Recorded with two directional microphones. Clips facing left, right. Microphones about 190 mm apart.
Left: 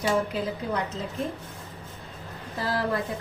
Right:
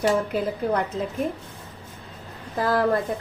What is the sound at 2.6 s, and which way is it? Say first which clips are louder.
Speech: right 6 dB; 50° right (ahead or behind).